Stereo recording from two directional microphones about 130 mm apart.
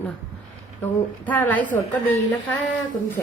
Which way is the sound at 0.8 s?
15° left (ahead or behind).